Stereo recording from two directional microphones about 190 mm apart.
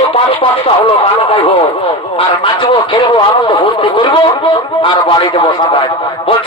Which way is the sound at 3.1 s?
25° left (ahead or behind).